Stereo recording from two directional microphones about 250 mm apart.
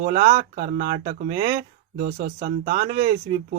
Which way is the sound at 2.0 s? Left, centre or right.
Right.